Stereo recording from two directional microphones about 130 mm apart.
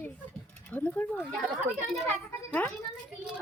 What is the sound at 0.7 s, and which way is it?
Speech, 10° left (ahead or behind).